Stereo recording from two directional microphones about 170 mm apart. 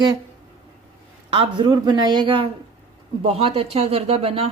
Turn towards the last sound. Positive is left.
turn(degrees=-35)  # may be behind; listen again after turning